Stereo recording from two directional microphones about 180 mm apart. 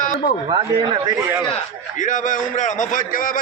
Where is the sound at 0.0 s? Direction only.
45° left (ahead or behind).